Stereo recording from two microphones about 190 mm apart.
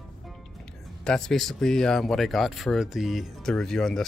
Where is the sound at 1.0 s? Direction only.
5° left (ahead or behind).